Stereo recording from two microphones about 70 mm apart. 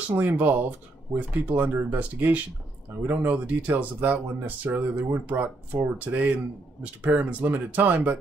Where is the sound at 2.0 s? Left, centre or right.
Right.